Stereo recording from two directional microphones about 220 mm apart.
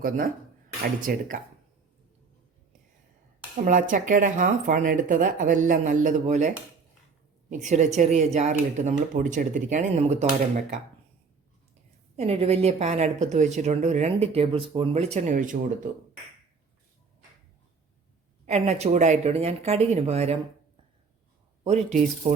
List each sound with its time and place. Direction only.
1.1 s a woman's voice: 40° right (ahead or behind)
3.6 s a woman's voice: 35° right (ahead or behind)
7.5 s a woman's voice: 35° right (ahead or behind)
12.1 s a woman's voice: 30° right (ahead or behind)
18.4 s speech: 30° right (ahead or behind)
21.6 s a man's voice: 30° right (ahead or behind)